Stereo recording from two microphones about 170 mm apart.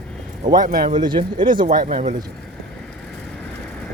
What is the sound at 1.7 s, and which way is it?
Speech, 45° right (ahead or behind).